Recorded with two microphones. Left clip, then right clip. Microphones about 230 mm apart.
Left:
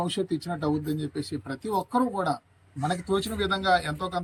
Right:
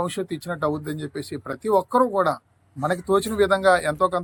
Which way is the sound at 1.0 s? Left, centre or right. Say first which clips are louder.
Right 2 dB; right.